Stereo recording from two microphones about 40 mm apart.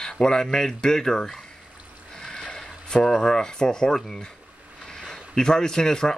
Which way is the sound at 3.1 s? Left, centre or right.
Centre.